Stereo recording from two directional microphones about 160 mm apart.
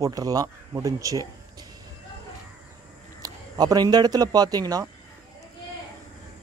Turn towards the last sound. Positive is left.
turn(degrees=-25)  # may be behind; listen again after turning